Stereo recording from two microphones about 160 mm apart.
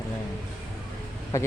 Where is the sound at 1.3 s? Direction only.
20° left (ahead or behind).